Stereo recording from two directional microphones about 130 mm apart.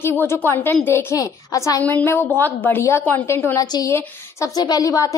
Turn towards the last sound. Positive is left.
turn(degrees=25)  # may be behind; listen again after turning